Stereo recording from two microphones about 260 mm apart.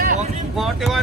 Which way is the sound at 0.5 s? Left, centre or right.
Centre.